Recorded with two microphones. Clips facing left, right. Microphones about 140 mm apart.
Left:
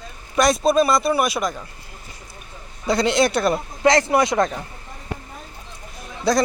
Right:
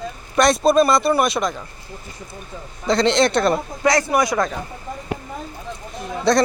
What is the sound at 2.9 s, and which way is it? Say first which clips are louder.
Speech: right 2 dB; 10° left (ahead or behind).